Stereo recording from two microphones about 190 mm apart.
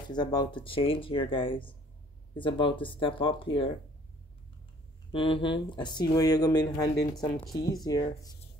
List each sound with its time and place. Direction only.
0.1 s speech: 20° left (ahead or behind)
5.1 s speech: 25° left (ahead or behind)